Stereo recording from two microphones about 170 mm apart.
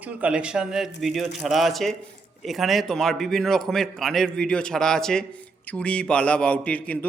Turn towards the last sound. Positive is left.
turn(degrees=10)  # may be behind; listen again after turning